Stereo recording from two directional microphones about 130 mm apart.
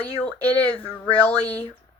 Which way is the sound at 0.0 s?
10° left (ahead or behind).